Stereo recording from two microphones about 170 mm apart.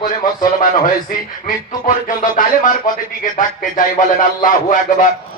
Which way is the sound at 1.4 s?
50° left (ahead or behind).